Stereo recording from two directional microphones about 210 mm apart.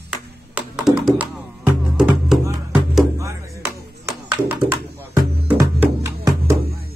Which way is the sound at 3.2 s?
15° right (ahead or behind).